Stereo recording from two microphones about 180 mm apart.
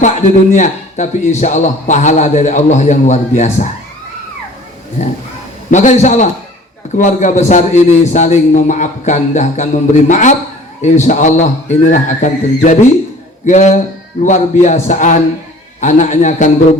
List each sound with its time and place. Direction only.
0.5 s a man's voice: 40° left (ahead or behind)
5.0 s a man's voice: 40° left (ahead or behind)